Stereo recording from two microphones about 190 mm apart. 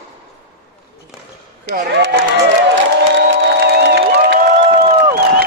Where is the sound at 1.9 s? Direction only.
60° right (ahead or behind).